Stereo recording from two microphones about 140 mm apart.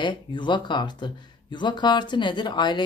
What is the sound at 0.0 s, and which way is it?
Speech, 35° left (ahead or behind).